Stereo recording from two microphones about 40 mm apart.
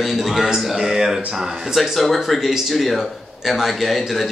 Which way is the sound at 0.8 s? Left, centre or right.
Centre.